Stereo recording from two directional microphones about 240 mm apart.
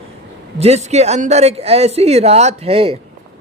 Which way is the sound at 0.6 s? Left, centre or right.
Right.